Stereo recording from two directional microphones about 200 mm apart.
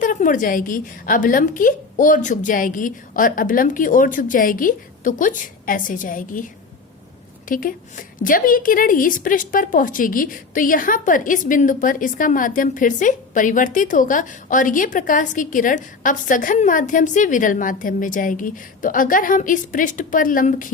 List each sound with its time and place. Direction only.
0.0 s a woman's voice: 40° left (ahead or behind)
7.4 s a woman's voice: 45° left (ahead or behind)